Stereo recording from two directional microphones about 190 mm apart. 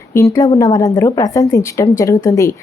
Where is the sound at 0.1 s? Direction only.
15° left (ahead or behind).